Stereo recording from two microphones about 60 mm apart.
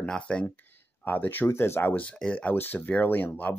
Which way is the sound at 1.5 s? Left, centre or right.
Left.